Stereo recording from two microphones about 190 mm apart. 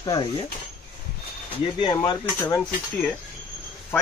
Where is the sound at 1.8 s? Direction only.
25° left (ahead or behind).